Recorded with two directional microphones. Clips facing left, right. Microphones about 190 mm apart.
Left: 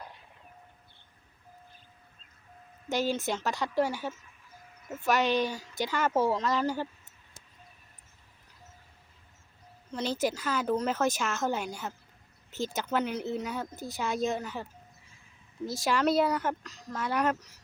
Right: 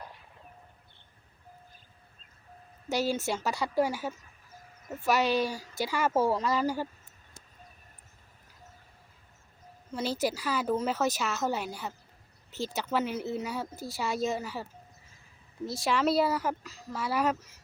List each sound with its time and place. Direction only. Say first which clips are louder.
3.2 s speech: even; 10° right (ahead or behind)
5.4 s speech: even; 35° right (ahead or behind)
5.8 s speech: even; 5° right (ahead or behind)
9.9 s speech: even; 5° right (ahead or behind)